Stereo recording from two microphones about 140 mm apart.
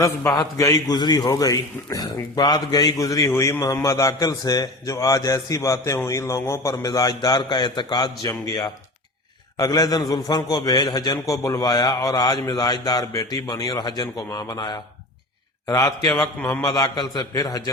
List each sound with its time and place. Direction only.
0.2 s a man's voice: 25° left (ahead or behind)
16.6 s a man's voice: 30° left (ahead or behind)